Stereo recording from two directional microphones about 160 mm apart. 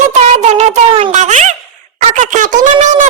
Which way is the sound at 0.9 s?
30° right (ahead or behind).